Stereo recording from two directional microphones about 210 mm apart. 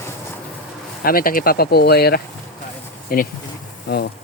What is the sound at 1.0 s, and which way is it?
Speech, 45° left (ahead or behind).